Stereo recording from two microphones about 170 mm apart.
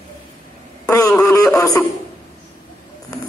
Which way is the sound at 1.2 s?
20° left (ahead or behind).